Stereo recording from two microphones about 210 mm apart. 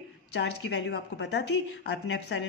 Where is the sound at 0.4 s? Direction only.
55° left (ahead or behind).